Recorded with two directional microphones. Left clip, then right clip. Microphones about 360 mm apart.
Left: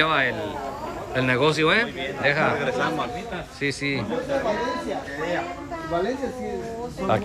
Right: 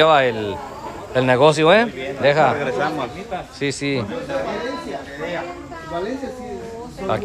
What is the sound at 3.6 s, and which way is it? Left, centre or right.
Speech, centre.